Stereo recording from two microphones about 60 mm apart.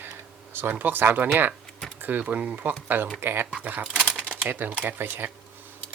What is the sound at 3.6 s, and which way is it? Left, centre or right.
Speech, right.